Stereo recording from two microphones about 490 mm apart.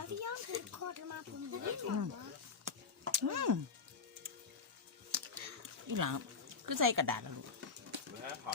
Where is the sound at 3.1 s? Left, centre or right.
Right.